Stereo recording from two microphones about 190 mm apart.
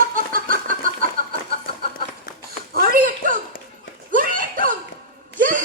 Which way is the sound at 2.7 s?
50° right (ahead or behind).